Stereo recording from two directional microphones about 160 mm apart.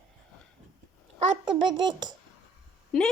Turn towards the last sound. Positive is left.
turn(degrees=0)  # may be behind; listen again after turning